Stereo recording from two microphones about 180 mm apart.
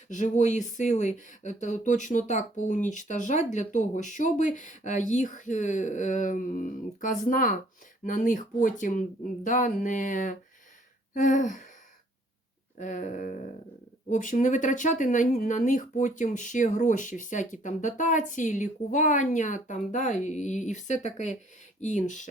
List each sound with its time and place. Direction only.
0.1 s speech: 40° left (ahead or behind)
12.8 s speech: 45° left (ahead or behind)